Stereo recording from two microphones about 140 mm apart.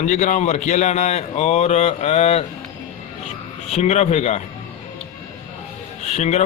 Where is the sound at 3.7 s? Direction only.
50° left (ahead or behind).